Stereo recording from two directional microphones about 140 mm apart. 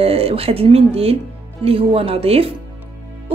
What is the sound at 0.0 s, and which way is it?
A woman's voice, 45° right (ahead or behind).